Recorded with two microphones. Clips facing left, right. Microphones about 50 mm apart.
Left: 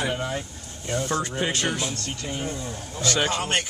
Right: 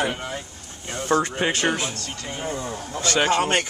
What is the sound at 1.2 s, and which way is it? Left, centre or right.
Speech, right.